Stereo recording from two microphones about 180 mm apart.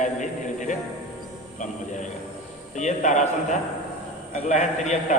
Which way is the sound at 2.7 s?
40° left (ahead or behind).